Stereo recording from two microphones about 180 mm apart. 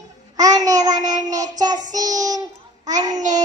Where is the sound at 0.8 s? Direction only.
20° right (ahead or behind).